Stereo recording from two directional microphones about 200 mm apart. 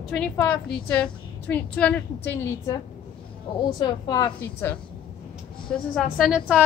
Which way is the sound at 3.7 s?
20° left (ahead or behind).